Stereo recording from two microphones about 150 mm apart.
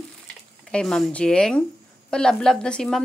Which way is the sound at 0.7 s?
5° left (ahead or behind).